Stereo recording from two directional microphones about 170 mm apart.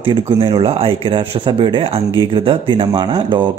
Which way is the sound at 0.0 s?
30° right (ahead or behind).